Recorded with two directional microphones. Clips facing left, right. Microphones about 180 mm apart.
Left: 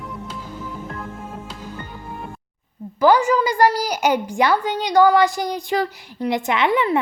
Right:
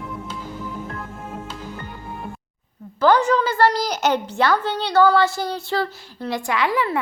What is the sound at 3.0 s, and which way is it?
A woman's voice, 10° left (ahead or behind).